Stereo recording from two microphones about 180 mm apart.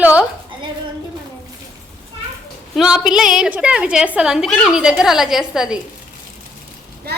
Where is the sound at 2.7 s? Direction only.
5° right (ahead or behind).